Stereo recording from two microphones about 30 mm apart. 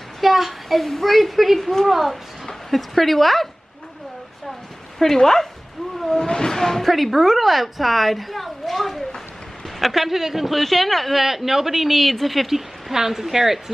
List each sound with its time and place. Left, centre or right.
0.2 s a woman's voice: centre
4.9 s speech: centre
6.1 s speech: left
6.9 s a woman's voice: centre
10.6 s a woman's voice: centre
11.2 s speech: centre